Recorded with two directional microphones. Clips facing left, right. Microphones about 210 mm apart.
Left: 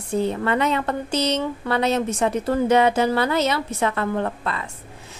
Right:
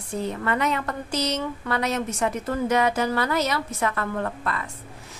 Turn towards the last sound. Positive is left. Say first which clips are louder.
# left 3 dB
turn(degrees=25)  # may be behind; listen again after turning